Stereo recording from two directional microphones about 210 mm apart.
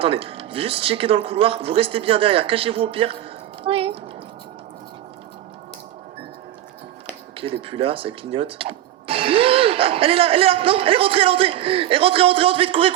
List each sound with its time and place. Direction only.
0.0 s speech: 25° right (ahead or behind)
7.3 s speech: 25° right (ahead or behind)